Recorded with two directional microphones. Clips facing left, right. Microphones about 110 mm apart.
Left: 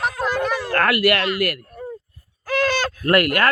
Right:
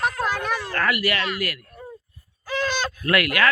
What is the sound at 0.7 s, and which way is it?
Speech, 60° left (ahead or behind).